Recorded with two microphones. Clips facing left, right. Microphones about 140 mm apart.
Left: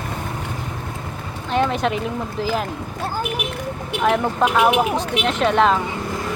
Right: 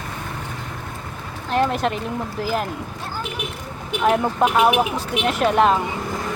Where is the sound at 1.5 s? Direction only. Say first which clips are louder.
Even; centre (ahead or behind).